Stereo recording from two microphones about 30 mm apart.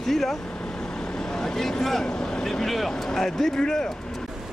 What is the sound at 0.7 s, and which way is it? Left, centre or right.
Vehicle, left.